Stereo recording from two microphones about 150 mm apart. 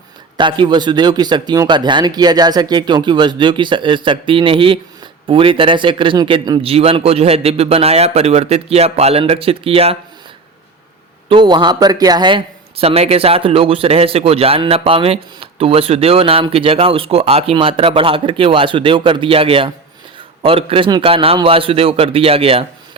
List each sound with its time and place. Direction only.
0.3 s a man's voice: 35° right (ahead or behind)
11.3 s a man's voice: 30° right (ahead or behind)